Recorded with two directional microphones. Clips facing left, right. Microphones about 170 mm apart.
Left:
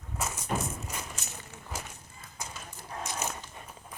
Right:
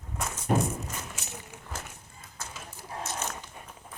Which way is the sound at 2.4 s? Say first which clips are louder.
Left 1 dB; 15° left (ahead or behind).